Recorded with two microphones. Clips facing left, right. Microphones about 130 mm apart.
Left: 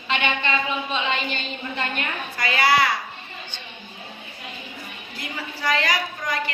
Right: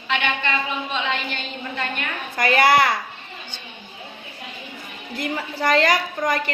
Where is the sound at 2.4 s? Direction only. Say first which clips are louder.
Right 4 dB; 50° right (ahead or behind).